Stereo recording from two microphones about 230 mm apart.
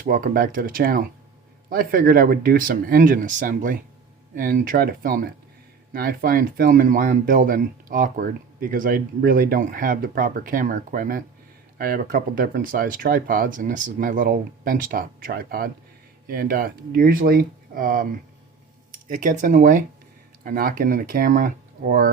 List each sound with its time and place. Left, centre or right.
0.0 s speech: right